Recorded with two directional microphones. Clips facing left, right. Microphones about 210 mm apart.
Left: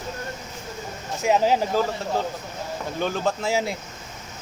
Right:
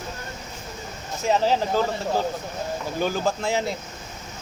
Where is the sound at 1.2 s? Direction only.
15° left (ahead or behind).